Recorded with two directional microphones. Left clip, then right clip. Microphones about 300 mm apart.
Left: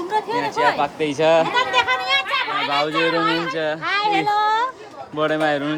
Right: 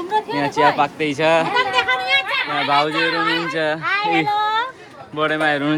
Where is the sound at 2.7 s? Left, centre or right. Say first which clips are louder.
Right 3 dB; centre.